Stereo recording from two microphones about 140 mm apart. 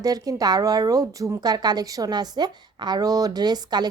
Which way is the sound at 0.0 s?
25° right (ahead or behind).